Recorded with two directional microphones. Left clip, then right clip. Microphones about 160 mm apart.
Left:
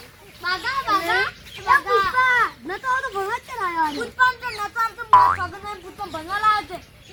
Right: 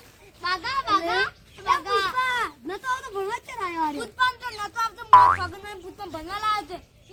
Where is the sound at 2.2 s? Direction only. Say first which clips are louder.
Left 7 dB; 30° right (ahead or behind).